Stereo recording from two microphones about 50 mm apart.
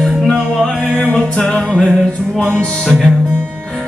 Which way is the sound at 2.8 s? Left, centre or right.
Centre.